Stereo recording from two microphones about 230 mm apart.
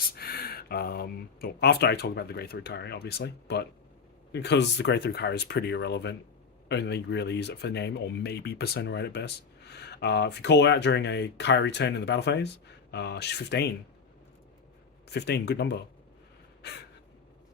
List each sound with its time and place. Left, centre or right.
0.2 s speech: left
15.1 s speech: left